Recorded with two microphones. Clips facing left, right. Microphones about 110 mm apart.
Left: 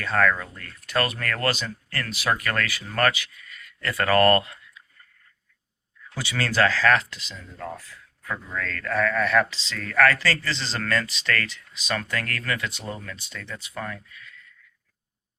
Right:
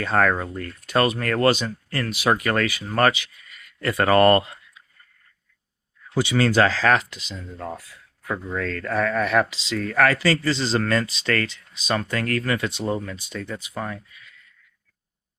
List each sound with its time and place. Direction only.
0.0 s speech: 25° right (ahead or behind)
0.3 s speech: 35° right (ahead or behind)
0.9 s speech: 20° right (ahead or behind)
6.1 s speech: 20° right (ahead or behind)
9.7 s speech: 25° right (ahead or behind)
13.2 s speech: 15° right (ahead or behind)